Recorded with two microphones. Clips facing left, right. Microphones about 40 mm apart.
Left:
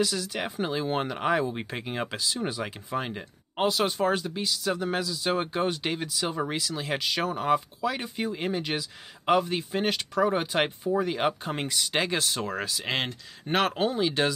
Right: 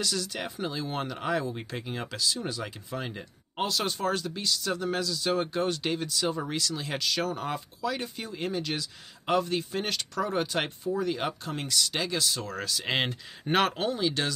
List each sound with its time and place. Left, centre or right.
0.0 s speech: centre
0.6 s speech: left
12.4 s speech: left
12.7 s speech: centre
13.7 s speech: centre